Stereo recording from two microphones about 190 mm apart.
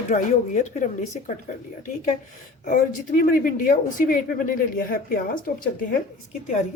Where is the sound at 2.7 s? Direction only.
45° left (ahead or behind).